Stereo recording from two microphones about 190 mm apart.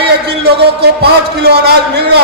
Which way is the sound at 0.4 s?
55° right (ahead or behind).